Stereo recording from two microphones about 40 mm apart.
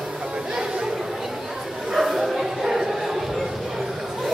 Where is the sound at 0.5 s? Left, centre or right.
Centre.